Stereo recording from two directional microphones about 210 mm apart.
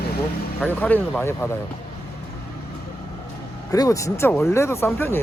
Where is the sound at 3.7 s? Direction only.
15° left (ahead or behind).